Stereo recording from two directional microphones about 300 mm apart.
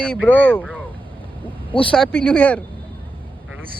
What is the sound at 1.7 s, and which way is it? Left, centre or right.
Speech, centre.